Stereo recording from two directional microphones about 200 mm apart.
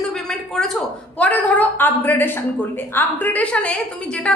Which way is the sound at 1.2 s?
10° left (ahead or behind).